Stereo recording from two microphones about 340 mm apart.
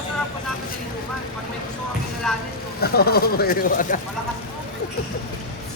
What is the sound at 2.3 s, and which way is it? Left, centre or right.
Vehicle, centre.